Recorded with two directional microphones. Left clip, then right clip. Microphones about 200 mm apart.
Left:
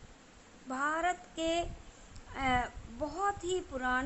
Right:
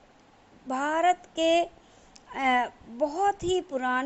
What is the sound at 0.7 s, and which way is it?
Speech, 25° right (ahead or behind).